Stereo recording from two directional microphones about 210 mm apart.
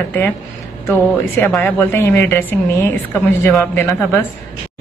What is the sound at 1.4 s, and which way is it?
Speech, 10° left (ahead or behind).